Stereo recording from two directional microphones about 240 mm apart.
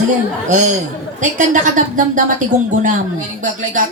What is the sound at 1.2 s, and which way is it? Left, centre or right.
A woman's voice, right.